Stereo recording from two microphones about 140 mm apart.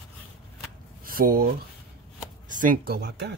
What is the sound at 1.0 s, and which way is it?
Speech, 90° right.